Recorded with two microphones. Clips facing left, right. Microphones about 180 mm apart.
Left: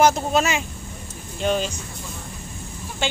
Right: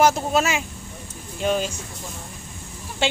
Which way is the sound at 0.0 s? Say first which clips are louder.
Left 1 dB; 5° right (ahead or behind).